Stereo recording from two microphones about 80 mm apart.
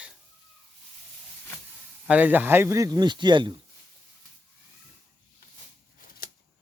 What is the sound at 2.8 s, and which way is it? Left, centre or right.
Speech, right.